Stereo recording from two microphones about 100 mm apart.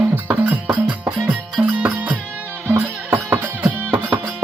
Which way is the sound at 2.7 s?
30° right (ahead or behind).